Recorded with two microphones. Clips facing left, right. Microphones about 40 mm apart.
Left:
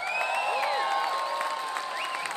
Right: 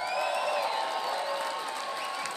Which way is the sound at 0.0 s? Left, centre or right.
Left.